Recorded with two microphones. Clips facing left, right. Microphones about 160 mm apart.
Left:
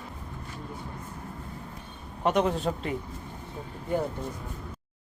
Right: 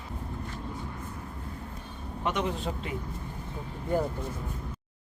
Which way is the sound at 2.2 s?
40° left (ahead or behind).